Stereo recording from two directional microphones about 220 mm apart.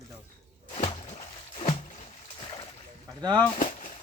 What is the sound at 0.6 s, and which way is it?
Music, 30° left (ahead or behind).